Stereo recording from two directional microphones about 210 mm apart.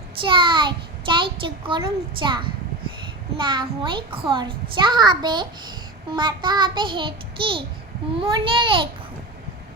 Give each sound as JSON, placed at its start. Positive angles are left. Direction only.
{"t": 0.2, "sound": "a child's voice", "side_deg": -25}